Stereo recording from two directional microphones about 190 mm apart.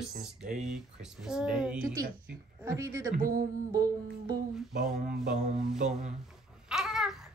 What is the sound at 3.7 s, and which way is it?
Child singing, 20° right (ahead or behind).